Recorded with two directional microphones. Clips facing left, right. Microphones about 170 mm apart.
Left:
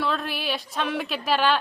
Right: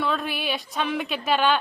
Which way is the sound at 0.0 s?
Centre (ahead or behind).